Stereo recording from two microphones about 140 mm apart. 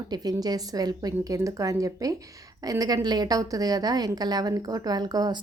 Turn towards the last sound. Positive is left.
turn(degrees=-25)  # may be behind; listen again after turning